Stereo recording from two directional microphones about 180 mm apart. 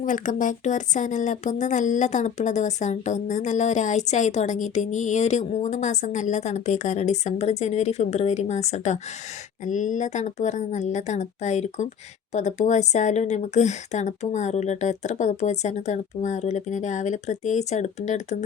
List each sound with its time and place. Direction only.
0.0 s speech: 45° left (ahead or behind)